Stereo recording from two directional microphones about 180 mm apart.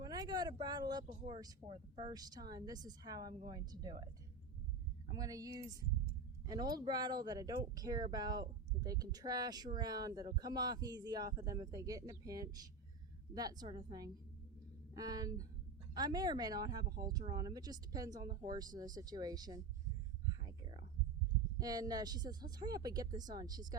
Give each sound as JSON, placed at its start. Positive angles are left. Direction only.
{"t": 0.0, "sound": "a sound", "side_deg": -20}
{"t": 0.5, "sound": "speech", "side_deg": -20}
{"t": 20.4, "sound": "whispering", "side_deg": -25}
{"t": 21.6, "sound": "speech", "side_deg": -20}